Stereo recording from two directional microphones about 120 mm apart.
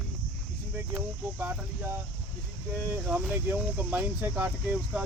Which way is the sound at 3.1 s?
5° right (ahead or behind).